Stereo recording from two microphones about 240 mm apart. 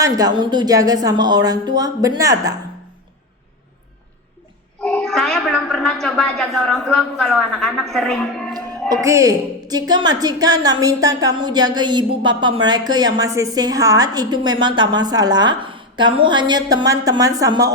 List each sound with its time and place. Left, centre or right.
0.0 s speech: centre
4.8 s a woman's voice: centre
8.9 s speech: centre